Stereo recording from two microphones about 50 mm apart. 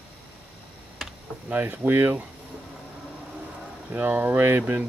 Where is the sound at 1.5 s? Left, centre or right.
Right.